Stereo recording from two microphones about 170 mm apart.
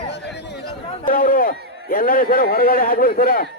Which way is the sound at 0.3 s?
80° left.